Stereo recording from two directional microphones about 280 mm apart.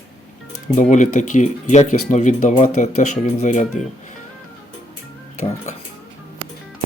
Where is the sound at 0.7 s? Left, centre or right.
Left.